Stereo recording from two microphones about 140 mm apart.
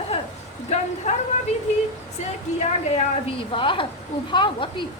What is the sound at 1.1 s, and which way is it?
Speech, 55° left (ahead or behind).